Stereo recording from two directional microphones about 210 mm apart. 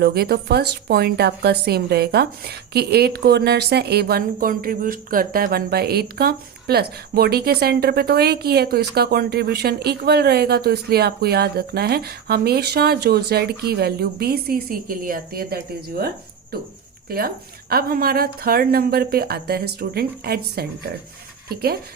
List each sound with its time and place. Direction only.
0.0 s a woman's voice: 50° right (ahead or behind)